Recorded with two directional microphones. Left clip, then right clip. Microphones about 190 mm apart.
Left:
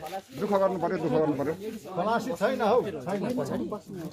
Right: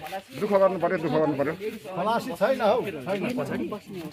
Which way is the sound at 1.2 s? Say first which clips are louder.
Right 3 dB; 40° right (ahead or behind).